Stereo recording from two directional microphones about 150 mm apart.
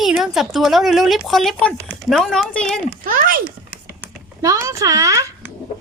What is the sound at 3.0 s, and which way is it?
Speech, 70° right (ahead or behind).